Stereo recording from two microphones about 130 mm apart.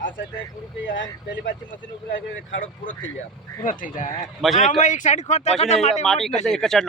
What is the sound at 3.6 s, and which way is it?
Speech, 90° left.